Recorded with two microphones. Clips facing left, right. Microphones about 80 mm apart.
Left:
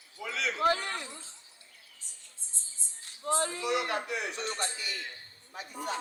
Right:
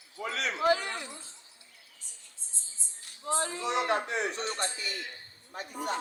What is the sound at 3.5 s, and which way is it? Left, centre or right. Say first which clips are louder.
Music: right 2 dB; right.